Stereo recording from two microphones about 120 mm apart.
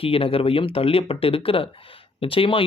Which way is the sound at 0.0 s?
50° left (ahead or behind).